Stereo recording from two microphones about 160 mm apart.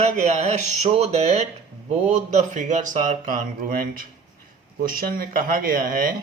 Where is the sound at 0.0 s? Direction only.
45° right (ahead or behind); by 6.1 s 60° right (ahead or behind).